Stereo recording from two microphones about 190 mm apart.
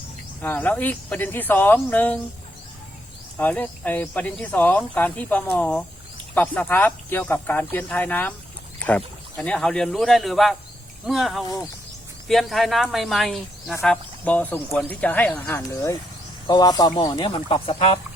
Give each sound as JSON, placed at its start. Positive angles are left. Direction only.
{"t": 0.4, "sound": "speech", "side_deg": 10}
{"t": 3.3, "sound": "speech", "side_deg": 10}